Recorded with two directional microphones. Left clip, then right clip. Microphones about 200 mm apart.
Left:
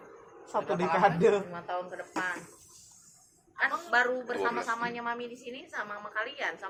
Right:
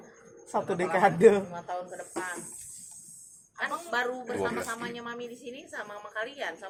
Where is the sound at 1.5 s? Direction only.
35° right (ahead or behind).